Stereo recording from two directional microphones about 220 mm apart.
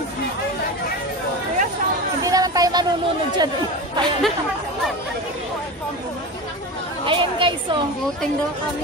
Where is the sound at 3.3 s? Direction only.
20° right (ahead or behind).